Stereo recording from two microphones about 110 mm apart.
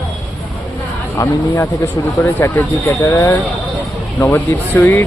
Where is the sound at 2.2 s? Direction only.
25° left (ahead or behind).